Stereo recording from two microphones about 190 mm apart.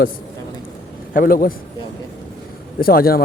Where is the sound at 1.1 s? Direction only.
45° left (ahead or behind).